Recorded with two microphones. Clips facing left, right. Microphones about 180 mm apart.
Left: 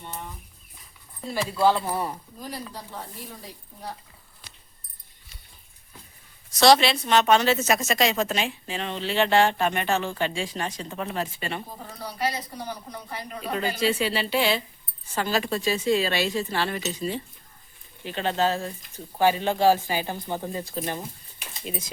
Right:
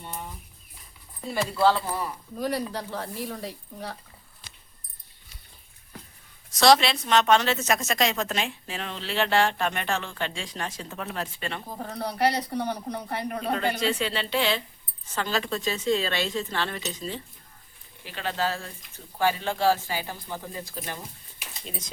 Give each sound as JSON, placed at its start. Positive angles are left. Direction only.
{"t": 1.2, "sound": "speech", "side_deg": 0}
{"t": 1.5, "sound": "speech", "side_deg": 15}
{"t": 2.4, "sound": "speech", "side_deg": -75}
{"t": 6.5, "sound": "a woman's voice", "side_deg": 0}
{"t": 11.8, "sound": "speech", "side_deg": -60}
{"t": 13.7, "sound": "speech", "side_deg": 10}
{"t": 18.0, "sound": "speech", "side_deg": 25}
{"t": 21.6, "sound": "speech", "side_deg": 10}